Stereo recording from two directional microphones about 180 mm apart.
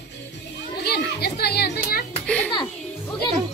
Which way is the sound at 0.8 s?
65° left (ahead or behind).